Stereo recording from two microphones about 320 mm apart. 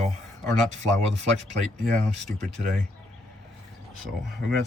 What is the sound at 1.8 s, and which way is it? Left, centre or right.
Speech, centre.